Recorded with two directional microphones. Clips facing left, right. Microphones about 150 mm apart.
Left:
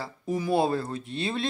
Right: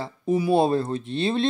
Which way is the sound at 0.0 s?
20° right (ahead or behind).